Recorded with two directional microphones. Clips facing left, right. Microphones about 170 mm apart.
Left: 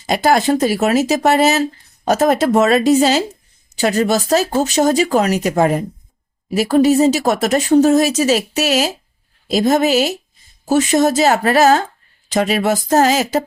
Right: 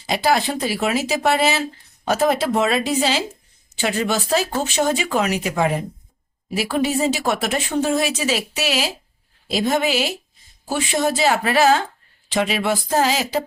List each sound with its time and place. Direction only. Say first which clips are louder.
0.0 s speech: left 5 dB; 45° left (ahead or behind)